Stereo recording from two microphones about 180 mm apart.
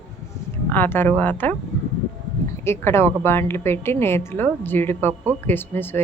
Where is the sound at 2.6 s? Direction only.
15° left (ahead or behind).